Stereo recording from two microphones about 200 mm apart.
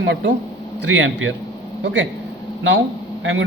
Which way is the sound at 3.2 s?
70° right (ahead or behind).